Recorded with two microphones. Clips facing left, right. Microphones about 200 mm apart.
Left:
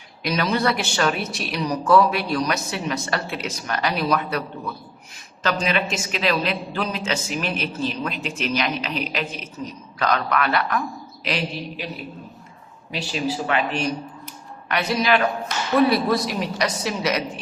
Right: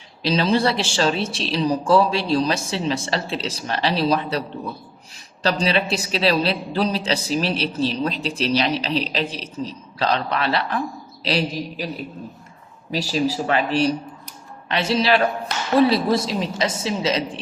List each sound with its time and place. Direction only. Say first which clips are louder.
0.2 s a woman's voice: right 3 dB; 30° right (ahead or behind)
12.9 s a woman's voice: right 4 dB; 35° right (ahead or behind)